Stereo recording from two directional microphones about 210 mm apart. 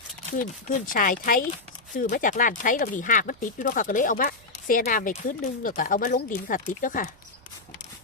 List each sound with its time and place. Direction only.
0.3 s speech: 40° left (ahead or behind)